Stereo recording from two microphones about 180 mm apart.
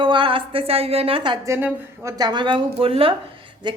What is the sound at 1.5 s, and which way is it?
A woman's voice, 15° right (ahead or behind).